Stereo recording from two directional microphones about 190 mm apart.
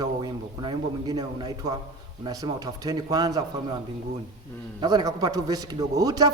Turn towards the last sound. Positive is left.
turn(degrees=-20)  # may be behind; listen again after turning